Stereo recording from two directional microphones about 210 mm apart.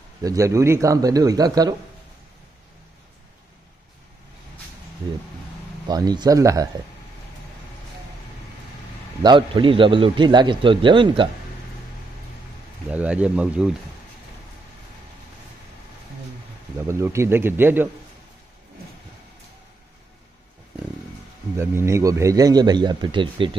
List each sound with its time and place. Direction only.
0.2 s speech: 15° right (ahead or behind)
5.9 s speech: 20° right (ahead or behind)
9.2 s a man's voice: 20° right (ahead or behind)
12.9 s speech: 5° right (ahead or behind)
16.8 s speech: 15° right (ahead or behind)
21.5 s speech: 15° right (ahead or behind)